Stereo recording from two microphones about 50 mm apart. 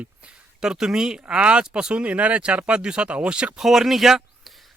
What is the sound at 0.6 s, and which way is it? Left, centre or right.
Speech, centre.